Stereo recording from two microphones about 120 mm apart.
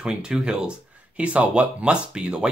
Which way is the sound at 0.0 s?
5° right (ahead or behind).